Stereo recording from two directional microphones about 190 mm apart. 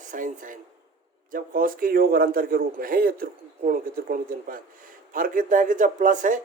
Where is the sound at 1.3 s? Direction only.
45° right (ahead or behind).